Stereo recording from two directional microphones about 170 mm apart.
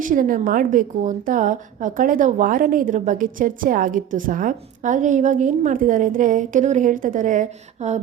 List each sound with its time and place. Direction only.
0.0 s a woman's voice: 50° right (ahead or behind)